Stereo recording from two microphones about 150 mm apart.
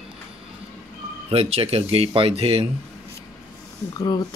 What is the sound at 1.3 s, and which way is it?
Speech, 40° right (ahead or behind).